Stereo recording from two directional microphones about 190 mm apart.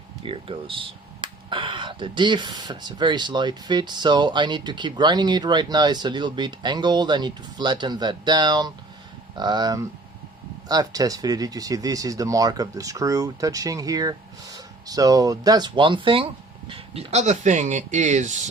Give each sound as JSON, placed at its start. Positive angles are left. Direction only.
{"t": 0.2, "sound": "speech", "side_deg": -30}